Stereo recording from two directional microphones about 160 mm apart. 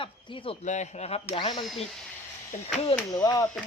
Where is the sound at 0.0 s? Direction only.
30° left (ahead or behind).